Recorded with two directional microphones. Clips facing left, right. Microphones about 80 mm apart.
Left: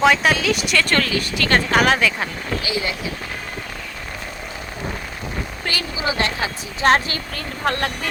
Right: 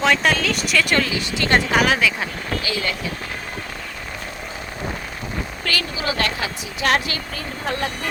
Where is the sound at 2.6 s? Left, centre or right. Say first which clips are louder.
Left 1 dB; centre.